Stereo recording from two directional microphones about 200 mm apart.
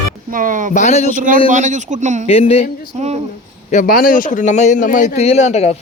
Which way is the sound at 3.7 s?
40° left (ahead or behind).